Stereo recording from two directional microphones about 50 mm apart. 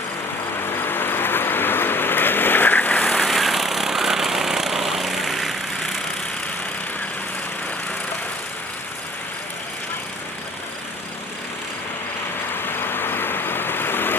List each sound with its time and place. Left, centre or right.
0.7 s vehicle: left
3.2 s vehicle: centre
12.6 s vehicle: left